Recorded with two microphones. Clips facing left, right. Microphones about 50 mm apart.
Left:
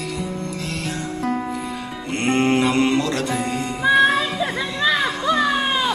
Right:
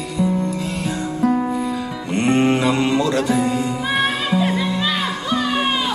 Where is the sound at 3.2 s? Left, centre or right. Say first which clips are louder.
Right 5 dB; left.